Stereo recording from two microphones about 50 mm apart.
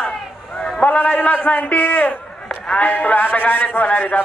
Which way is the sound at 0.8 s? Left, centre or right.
Left.